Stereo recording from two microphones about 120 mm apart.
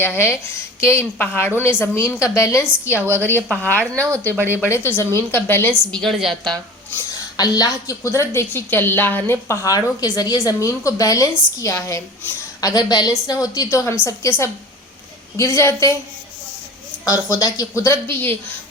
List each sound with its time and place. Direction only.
0.0 s a woman's voice: 20° left (ahead or behind)
4.0 s speech: 25° right (ahead or behind)
4.6 s speech: 20° left (ahead or behind)
5.9 s a woman's voice: centre (ahead or behind)
7.3 s a woman's voice: 30° left (ahead or behind)
17.1 s a woman's voice: 25° left (ahead or behind)